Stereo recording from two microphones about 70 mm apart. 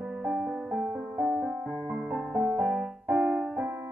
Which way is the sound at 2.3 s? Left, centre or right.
Right.